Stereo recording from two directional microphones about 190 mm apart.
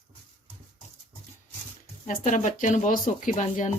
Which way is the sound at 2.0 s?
40° left (ahead or behind).